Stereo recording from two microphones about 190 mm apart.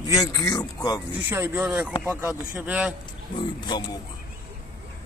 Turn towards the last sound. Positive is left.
turn(degrees=25)  # may be behind; listen again after turning